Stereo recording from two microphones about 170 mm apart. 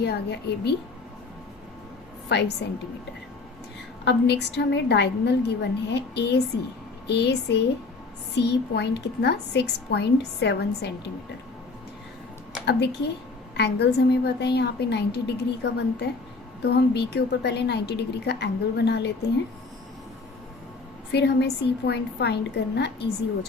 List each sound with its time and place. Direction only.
0.0 s a woman's voice: 75° left (ahead or behind)
2.3 s a woman's voice: 80° left
4.0 s a woman's voice: 85° left
12.6 s a woman's voice: 80° left
16.6 s a woman's voice: 75° left (ahead or behind)
21.1 s a woman's voice: 80° left